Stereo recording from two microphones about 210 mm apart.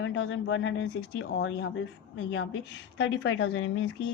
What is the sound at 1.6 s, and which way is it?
Speech, 65° left (ahead or behind).